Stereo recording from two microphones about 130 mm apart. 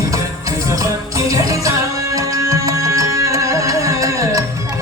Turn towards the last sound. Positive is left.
turn(degrees=-25)  # may be behind; listen again after turning